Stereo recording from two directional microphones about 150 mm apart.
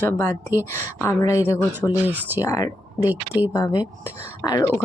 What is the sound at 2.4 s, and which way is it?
Speech, 20° left (ahead or behind).